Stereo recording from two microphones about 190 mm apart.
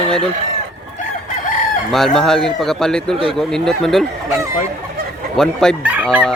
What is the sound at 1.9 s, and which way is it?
Fowl, centre (ahead or behind).